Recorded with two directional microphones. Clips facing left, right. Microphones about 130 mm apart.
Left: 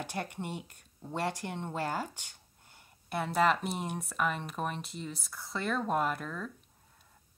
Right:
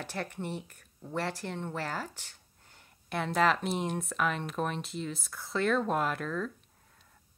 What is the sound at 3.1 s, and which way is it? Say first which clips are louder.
Speech: even; 5° left (ahead or behind).